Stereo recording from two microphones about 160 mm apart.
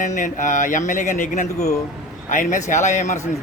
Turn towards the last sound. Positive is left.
turn(degrees=50)  # may be behind; listen again after turning